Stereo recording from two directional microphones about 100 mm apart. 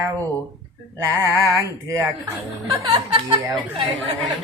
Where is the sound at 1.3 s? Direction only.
30° right (ahead or behind).